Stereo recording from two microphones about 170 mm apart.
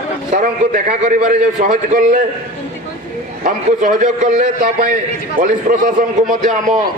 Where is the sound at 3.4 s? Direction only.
50° right (ahead or behind).